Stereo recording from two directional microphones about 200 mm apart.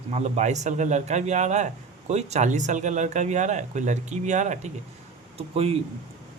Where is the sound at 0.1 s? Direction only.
35° right (ahead or behind).